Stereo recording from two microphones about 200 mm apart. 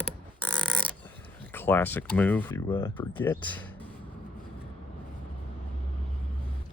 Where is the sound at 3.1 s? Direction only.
10° left (ahead or behind).